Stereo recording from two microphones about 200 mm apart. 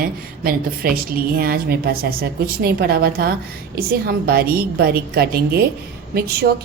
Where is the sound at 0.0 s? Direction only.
45° right (ahead or behind).